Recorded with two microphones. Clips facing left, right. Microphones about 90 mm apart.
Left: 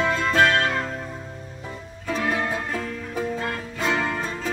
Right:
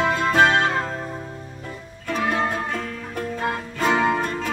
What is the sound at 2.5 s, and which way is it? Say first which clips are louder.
Music: right 1 dB; 5° left (ahead or behind).